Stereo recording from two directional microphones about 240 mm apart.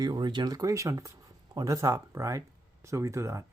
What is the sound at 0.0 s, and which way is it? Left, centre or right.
Speech, centre.